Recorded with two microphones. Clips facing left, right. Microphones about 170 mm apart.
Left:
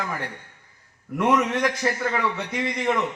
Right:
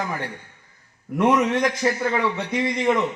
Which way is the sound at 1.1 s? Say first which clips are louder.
Right 2 dB; 20° right (ahead or behind).